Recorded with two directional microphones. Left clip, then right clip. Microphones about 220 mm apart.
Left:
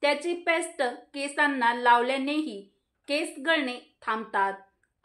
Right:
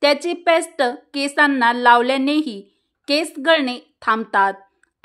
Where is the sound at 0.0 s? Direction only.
50° right (ahead or behind).